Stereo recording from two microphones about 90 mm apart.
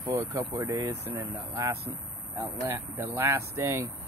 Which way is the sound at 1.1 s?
20° right (ahead or behind).